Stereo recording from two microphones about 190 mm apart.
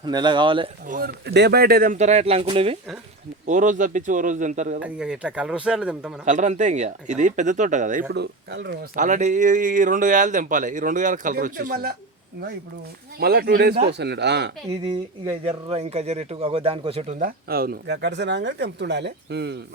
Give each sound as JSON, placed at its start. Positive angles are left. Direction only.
{"t": 0.0, "sound": "speech", "side_deg": -25}
{"t": 0.9, "sound": "speech", "side_deg": -50}
{"t": 3.4, "sound": "speech", "side_deg": -40}
{"t": 4.8, "sound": "speech", "side_deg": -5}
{"t": 6.2, "sound": "speech", "side_deg": -40}
{"t": 8.1, "sound": "speech", "side_deg": -60}
{"t": 9.0, "sound": "speech", "side_deg": -40}
{"t": 13.1, "sound": "speech", "side_deg": -55}
{"t": 14.7, "sound": "speech", "side_deg": -15}
{"t": 15.4, "sound": "speech", "side_deg": -30}
{"t": 17.2, "sound": "speech", "side_deg": -50}